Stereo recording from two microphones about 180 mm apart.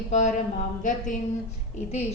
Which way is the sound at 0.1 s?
40° left (ahead or behind).